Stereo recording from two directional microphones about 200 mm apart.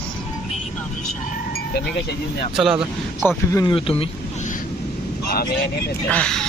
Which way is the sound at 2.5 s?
5° right (ahead or behind).